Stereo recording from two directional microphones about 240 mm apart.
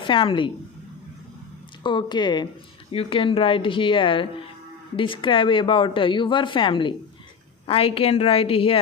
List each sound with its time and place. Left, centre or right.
0.0 s a woman's voice: left
1.8 s a woman's voice: centre